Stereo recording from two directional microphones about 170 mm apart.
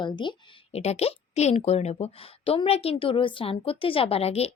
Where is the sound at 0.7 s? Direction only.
40° left (ahead or behind).